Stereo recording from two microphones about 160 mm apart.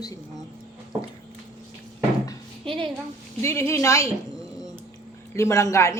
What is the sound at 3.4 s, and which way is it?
Speech, 15° left (ahead or behind).